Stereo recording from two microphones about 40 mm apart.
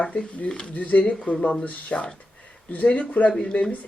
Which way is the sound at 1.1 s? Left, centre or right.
Left.